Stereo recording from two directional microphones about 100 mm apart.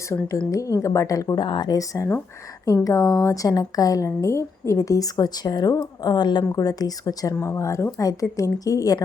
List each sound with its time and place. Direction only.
0.3 s a woman's voice: 35° left (ahead or behind)